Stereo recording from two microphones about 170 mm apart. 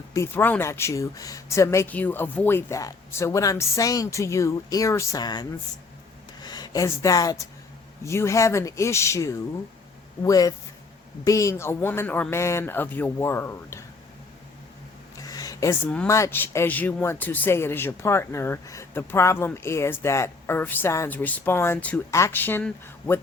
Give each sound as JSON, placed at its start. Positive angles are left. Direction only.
{"t": 0.1, "sound": "speech", "side_deg": 15}
{"t": 15.2, "sound": "a sound", "side_deg": 20}
{"t": 16.0, "sound": "speech", "side_deg": 15}